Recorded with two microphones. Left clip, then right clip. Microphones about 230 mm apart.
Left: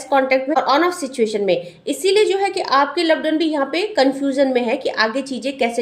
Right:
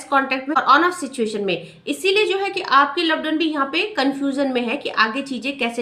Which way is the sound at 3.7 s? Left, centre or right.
Right.